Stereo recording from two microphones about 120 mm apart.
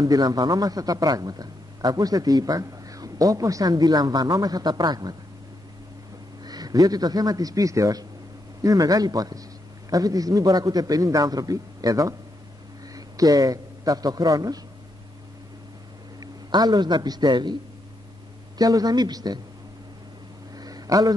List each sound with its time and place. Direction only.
0.0 s a man's voice: 30° right (ahead or behind)
6.4 s a man's voice: 35° right (ahead or behind)
16.2 s a man's voice: 35° right (ahead or behind)
18.6 s a man's voice: 30° right (ahead or behind)
20.5 s a sound: 30° right (ahead or behind)